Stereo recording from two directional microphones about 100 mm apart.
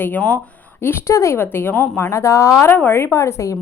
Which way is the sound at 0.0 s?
15° left (ahead or behind).